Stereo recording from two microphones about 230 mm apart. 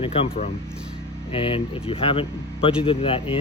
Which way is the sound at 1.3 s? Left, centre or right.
Left.